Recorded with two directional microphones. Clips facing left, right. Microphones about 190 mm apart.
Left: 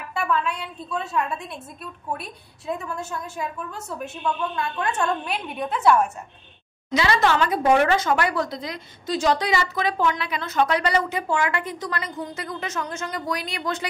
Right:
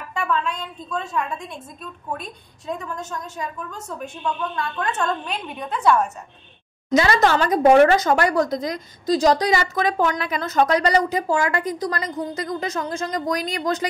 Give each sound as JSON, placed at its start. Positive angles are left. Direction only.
{"t": 0.1, "sound": "a woman's voice", "side_deg": 5}
{"t": 6.9, "sound": "a woman's voice", "side_deg": -45}